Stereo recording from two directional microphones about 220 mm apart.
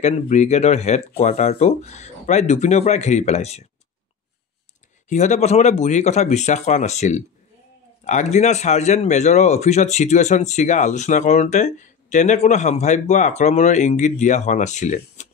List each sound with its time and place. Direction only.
0.0 s speech: 30° left (ahead or behind)
5.1 s speech: 30° left (ahead or behind)